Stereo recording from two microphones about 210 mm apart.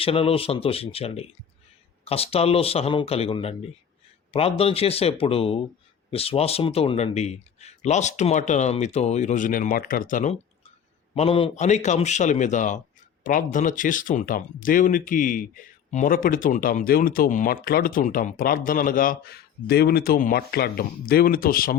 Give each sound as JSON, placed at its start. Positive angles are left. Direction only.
{"t": 0.0, "sound": "speech", "side_deg": 25}
{"t": 11.1, "sound": "speech", "side_deg": 25}